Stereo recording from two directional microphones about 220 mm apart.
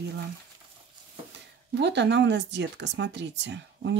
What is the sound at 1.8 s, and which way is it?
Speech, 50° right (ahead or behind).